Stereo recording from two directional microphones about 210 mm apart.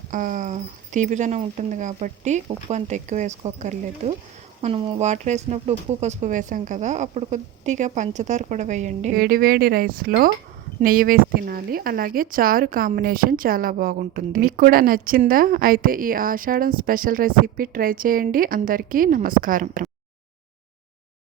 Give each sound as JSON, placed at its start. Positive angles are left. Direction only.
{"t": 0.1, "sound": "speech", "side_deg": -40}